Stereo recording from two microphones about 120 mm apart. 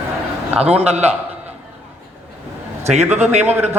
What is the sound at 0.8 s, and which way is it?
Speech, 60° right (ahead or behind).